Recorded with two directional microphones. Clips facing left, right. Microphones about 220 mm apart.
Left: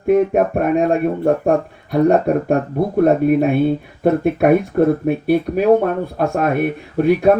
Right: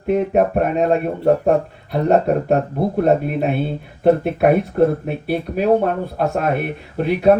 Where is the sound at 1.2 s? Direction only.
50° left (ahead or behind).